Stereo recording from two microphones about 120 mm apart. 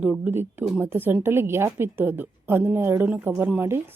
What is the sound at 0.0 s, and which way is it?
A woman's voice, 15° right (ahead or behind).